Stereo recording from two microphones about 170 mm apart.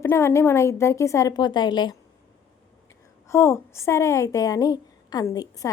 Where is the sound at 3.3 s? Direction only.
15° left (ahead or behind).